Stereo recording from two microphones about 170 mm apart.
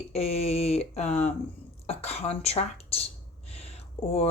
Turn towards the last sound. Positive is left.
turn(degrees=35)  # may be behind; listen again after turning